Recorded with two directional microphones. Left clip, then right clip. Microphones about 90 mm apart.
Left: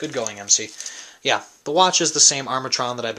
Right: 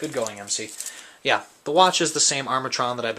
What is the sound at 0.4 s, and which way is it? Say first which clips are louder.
Speech: left 9 dB; 35° left (ahead or behind).